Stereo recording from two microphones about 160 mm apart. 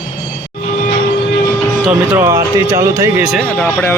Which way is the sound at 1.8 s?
10° right (ahead or behind).